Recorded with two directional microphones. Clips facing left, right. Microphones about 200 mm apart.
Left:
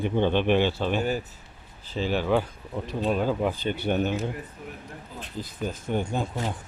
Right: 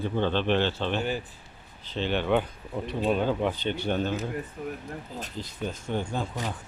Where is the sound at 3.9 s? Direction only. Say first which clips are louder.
Left 3 dB; 15° left (ahead or behind).